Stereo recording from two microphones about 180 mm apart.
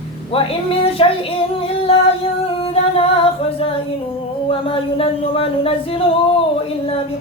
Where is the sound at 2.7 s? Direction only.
30° left (ahead or behind).